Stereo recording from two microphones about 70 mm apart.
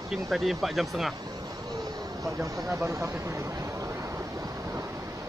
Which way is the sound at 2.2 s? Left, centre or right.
Right.